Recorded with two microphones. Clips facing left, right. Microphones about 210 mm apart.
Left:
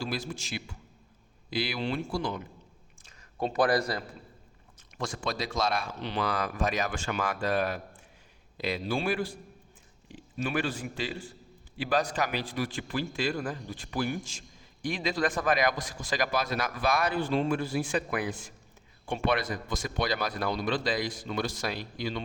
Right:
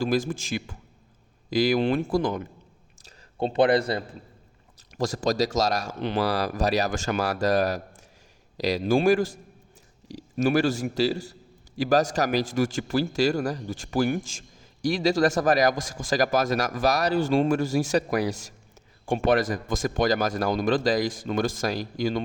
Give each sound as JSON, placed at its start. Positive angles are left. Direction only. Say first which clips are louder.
{"t": 0.0, "sound": "speech", "louder": "right 9 dB", "side_deg": -50}
{"t": 3.0, "sound": "speech", "louder": "right 4 dB", "side_deg": -30}
{"t": 4.9, "sound": "speech", "louder": "right 9 dB", "side_deg": -40}
{"t": 6.2, "sound": "speech", "louder": "right 3 dB", "side_deg": -35}
{"t": 10.3, "sound": "speech", "louder": "right 9 dB", "side_deg": -40}